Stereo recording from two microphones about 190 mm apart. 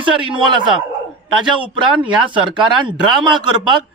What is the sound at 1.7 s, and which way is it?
Speech, 25° right (ahead or behind).